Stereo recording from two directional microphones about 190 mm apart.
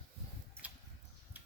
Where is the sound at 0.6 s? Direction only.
5° right (ahead or behind).